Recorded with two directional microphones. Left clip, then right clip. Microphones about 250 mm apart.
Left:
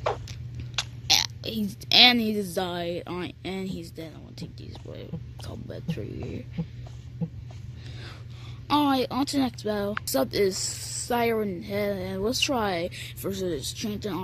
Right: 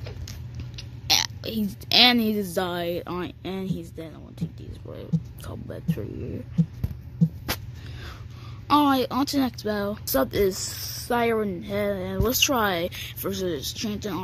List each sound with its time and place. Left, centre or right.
0.7 s speech: centre
8.6 s speech: centre